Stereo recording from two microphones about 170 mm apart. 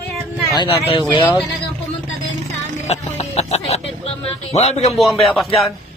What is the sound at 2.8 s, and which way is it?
Music, 40° left (ahead or behind).